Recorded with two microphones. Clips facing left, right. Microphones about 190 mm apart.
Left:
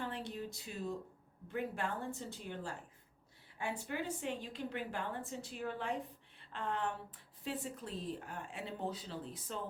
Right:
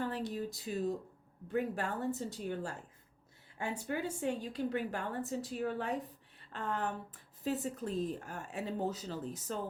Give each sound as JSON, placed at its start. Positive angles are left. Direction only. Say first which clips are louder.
{"t": 0.0, "sound": "a woman's voice", "louder": "right 5 dB", "side_deg": -40}